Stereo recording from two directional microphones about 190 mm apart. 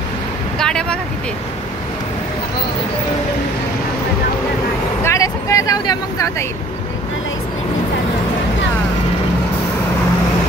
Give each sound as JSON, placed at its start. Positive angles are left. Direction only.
{"t": 0.6, "sound": "vehicle", "side_deg": 5}
{"t": 5.0, "sound": "vehicle", "side_deg": 15}